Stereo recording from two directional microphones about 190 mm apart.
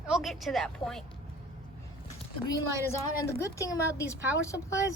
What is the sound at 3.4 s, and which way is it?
A woman's voice, 15° left (ahead or behind).